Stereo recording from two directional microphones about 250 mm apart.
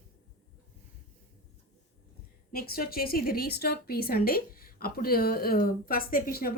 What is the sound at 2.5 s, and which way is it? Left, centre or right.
A woman's voice, left.